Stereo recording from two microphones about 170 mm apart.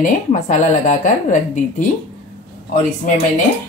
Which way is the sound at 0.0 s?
50° left (ahead or behind).